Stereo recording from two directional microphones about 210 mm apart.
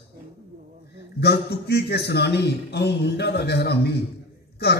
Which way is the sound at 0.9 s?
50° left (ahead or behind).